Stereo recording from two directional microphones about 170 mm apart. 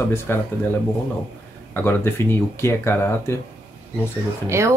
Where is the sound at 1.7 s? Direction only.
15° left (ahead or behind).